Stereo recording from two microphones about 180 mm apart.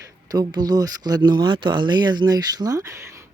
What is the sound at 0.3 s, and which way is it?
Speech, 20° right (ahead or behind).